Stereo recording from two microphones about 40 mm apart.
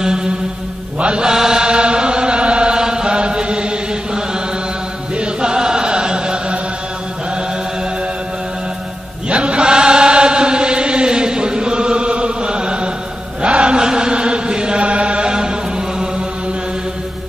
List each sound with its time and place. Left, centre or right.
0.0 s mantra: centre
1.2 s chant: centre
9.3 s chant: right